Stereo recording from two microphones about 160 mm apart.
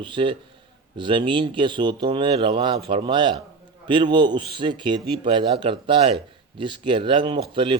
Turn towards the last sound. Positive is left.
turn(degrees=-30)  # may be behind; listen again after turning